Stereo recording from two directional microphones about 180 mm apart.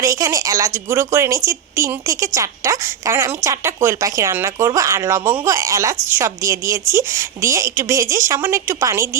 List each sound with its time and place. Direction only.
0.0 s a woman's voice: 15° right (ahead or behind)